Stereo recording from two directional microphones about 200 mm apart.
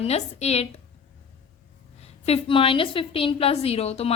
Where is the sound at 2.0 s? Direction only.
30° left (ahead or behind).